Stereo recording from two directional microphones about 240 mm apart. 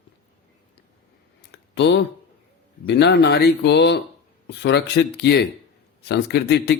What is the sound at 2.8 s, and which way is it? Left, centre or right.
A man's voice, left.